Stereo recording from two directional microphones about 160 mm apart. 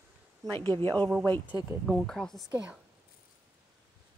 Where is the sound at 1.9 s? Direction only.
5° left (ahead or behind).